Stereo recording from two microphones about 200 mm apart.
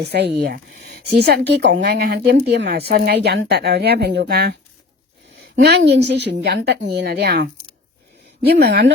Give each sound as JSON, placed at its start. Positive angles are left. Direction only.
{"t": 0.0, "sound": "speech", "side_deg": -55}